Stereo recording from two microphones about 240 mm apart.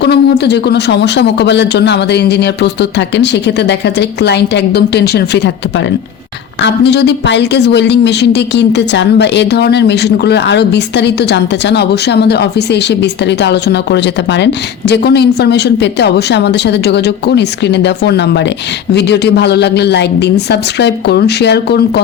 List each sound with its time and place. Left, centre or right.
0.0 s a woman's voice: left